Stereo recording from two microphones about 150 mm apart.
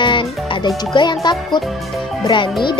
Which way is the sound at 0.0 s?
35° left (ahead or behind).